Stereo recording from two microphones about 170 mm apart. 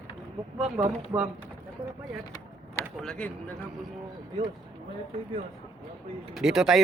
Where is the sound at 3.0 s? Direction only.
5° left (ahead or behind).